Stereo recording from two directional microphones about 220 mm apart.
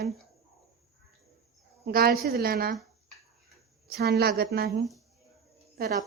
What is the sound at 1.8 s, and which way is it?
Speech, 45° right (ahead or behind).